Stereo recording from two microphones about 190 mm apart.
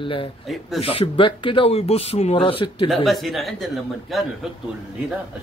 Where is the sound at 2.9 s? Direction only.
Centre (ahead or behind).